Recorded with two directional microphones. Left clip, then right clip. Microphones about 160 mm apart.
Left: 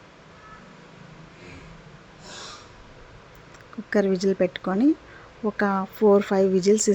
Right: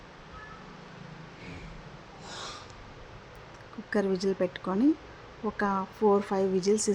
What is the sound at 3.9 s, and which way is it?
Speech, 20° left (ahead or behind).